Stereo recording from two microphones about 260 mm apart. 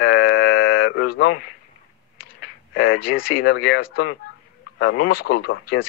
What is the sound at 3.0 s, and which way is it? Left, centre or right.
Speech, left.